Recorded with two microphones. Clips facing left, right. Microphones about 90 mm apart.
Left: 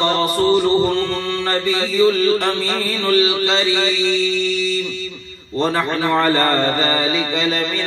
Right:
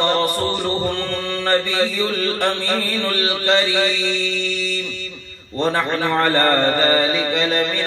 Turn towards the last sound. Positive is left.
turn(degrees=-45)  # may be behind; listen again after turning